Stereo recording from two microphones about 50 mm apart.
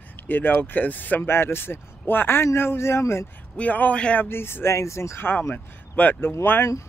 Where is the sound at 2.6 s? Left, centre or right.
Left.